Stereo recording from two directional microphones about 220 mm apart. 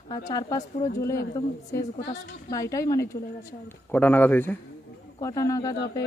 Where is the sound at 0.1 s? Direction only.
15° left (ahead or behind).